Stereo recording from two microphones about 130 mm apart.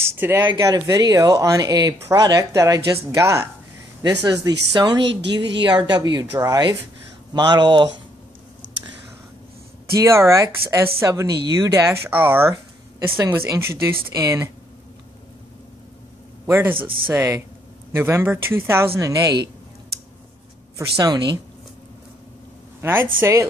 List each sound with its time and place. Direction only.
0.0 s speech: 20° right (ahead or behind); by 8.0 s 35° right (ahead or behind)
9.9 s speech: 20° right (ahead or behind)
16.4 s speech: 20° right (ahead or behind)
16.7 s speech: 40° right (ahead or behind)
17.1 s speech: 20° right (ahead or behind)
21.0 s speech: 30° right (ahead or behind)
22.8 s a woman's voice: 20° right (ahead or behind)